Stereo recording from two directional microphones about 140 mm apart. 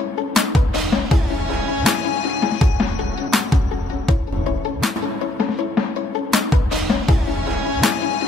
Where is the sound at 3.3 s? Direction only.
Centre (ahead or behind).